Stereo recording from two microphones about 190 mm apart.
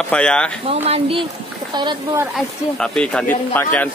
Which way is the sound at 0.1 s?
5° left (ahead or behind).